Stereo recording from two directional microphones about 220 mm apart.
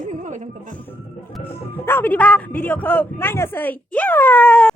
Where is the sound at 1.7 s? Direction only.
10° left (ahead or behind).